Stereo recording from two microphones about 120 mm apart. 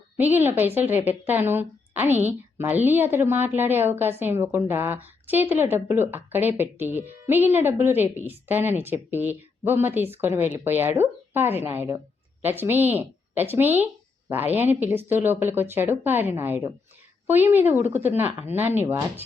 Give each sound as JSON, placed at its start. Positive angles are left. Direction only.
{"t": 0.2, "sound": "a woman's voice", "side_deg": -15}